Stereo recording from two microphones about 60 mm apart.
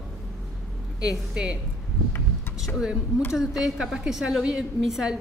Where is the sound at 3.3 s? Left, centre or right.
Centre.